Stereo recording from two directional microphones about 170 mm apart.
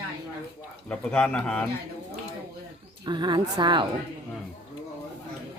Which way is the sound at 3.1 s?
25° right (ahead or behind).